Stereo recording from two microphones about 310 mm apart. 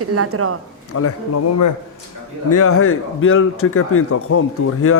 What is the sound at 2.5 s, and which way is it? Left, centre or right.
A man's voice, left.